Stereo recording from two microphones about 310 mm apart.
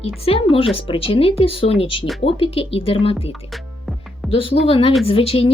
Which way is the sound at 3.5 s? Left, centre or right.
Centre.